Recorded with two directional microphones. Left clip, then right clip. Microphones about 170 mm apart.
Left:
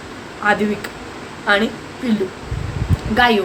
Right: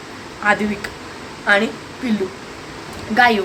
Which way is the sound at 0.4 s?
Centre (ahead or behind).